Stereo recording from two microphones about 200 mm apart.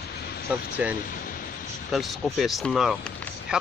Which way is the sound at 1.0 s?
45° left (ahead or behind).